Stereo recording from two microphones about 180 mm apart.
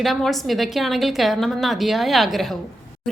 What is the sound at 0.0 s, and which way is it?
A woman's voice, centre (ahead or behind).